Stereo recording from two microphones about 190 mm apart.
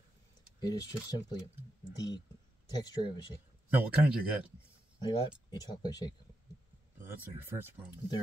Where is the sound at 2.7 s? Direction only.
20° left (ahead or behind).